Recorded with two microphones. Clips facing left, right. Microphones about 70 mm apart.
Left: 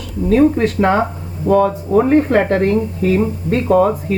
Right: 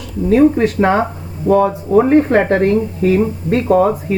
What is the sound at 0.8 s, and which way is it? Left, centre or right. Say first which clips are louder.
Speech: right 1 dB; centre.